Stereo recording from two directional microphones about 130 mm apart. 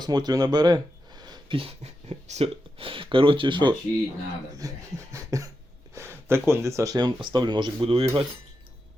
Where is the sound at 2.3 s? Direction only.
50° right (ahead or behind).